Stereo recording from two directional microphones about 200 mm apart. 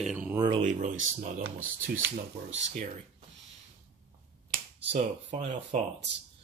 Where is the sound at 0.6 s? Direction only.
40° right (ahead or behind).